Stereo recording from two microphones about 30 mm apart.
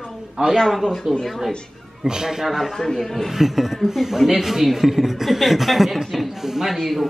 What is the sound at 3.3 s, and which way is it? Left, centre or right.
Speech, centre.